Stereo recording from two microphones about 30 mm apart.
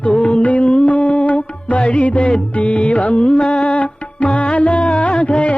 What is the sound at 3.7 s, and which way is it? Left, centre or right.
Music, left.